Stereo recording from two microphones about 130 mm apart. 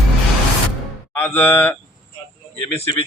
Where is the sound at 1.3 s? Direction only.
15° left (ahead or behind).